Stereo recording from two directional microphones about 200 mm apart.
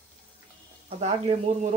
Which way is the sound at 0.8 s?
30° right (ahead or behind).